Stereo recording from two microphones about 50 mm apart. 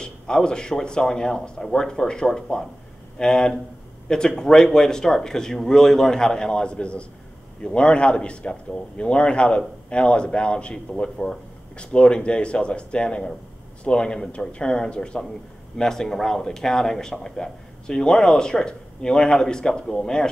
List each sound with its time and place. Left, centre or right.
0.0 s a man's voice: centre